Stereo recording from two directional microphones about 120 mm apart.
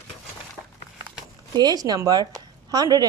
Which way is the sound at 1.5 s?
35° right (ahead or behind).